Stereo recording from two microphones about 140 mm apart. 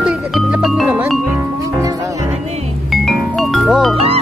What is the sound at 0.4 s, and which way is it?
Music, centre (ahead or behind).